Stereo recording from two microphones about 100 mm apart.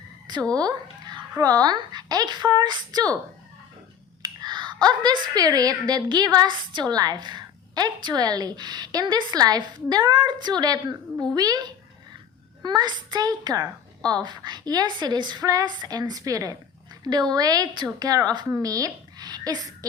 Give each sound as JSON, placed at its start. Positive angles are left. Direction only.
{"t": 0.5, "sound": "cat", "side_deg": -40}
{"t": 1.4, "sound": "speech", "side_deg": -40}
{"t": 4.2, "sound": "a woman's voice", "side_deg": -45}